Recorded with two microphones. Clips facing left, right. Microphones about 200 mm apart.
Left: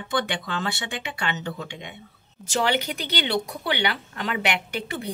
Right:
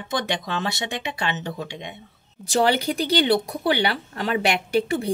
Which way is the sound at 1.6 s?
25° right (ahead or behind).